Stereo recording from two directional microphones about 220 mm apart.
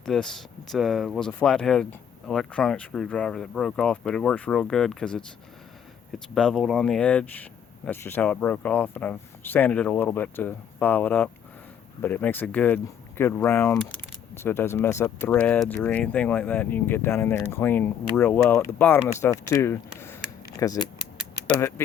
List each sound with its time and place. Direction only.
0.0 s speech: 5° left (ahead or behind)
6.3 s speech: 5° left (ahead or behind)